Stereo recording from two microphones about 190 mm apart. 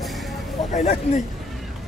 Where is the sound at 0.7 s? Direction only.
40° left (ahead or behind).